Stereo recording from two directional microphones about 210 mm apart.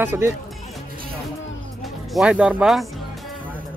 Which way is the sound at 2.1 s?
5° right (ahead or behind).